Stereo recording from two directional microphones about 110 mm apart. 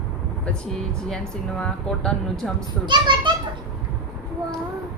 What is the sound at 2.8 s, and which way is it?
Speech, 45° right (ahead or behind).